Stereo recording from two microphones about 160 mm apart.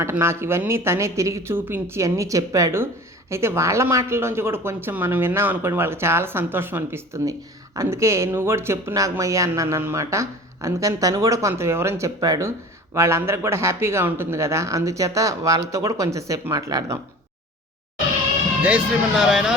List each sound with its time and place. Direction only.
0.0 s speech: 15° right (ahead or behind)
18.6 s speech: 5° right (ahead or behind)